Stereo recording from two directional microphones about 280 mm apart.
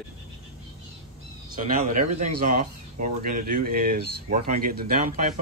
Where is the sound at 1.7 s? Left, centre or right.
Right.